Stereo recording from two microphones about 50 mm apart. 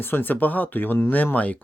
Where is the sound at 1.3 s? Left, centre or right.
Left.